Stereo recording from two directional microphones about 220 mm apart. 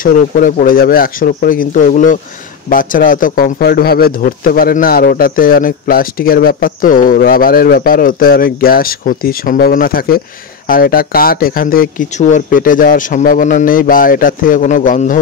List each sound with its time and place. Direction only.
0.0 s speech: 40° left (ahead or behind)